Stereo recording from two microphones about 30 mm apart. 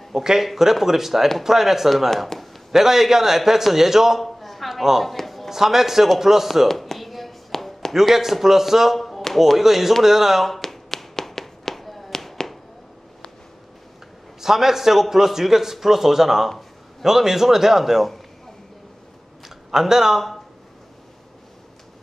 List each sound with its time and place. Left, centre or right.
0.1 s a man's voice: centre
2.7 s a man's voice: centre
4.2 s a sound: centre
5.5 s a man's voice: centre
6.7 s a sound: centre
8.1 s a man's voice: centre
8.9 s a sound: centre
9.6 s a man's voice: centre
10.5 s tap: centre
14.4 s a man's voice: centre
19.7 s a man's voice: centre